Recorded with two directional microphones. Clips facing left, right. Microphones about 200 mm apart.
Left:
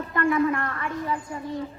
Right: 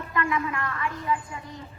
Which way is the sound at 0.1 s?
50° left (ahead or behind).